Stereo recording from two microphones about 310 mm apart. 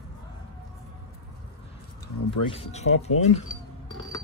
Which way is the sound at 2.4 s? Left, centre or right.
Centre.